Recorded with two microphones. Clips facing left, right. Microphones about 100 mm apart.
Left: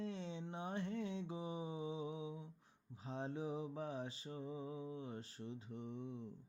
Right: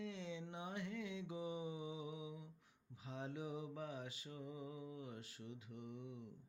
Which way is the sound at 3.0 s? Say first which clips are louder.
Left 4 dB; 35° left (ahead or behind).